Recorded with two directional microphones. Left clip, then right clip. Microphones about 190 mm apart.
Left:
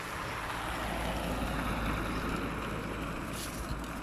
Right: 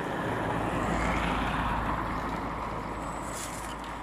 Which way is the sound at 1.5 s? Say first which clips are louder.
Right 5 dB; 45° left (ahead or behind).